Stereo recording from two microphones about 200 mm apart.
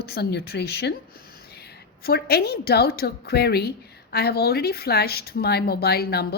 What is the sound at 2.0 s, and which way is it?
A woman's voice, 50° left (ahead or behind).